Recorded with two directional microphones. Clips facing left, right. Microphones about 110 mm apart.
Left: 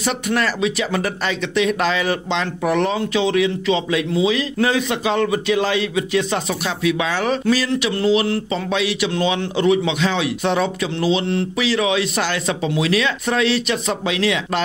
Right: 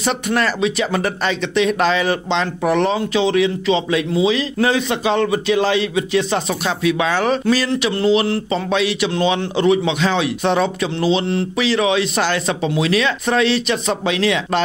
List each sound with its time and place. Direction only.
0.0 s speech: 35° right (ahead or behind)